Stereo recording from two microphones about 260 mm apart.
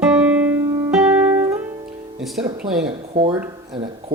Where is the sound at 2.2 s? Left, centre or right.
Centre.